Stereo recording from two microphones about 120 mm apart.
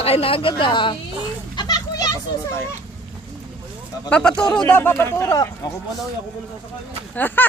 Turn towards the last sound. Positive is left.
turn(degrees=15)  # may be behind; listen again after turning